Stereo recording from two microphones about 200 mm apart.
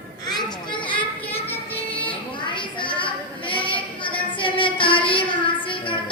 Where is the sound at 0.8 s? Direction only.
25° left (ahead or behind).